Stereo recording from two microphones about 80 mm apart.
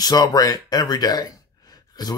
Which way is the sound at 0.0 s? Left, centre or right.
Left.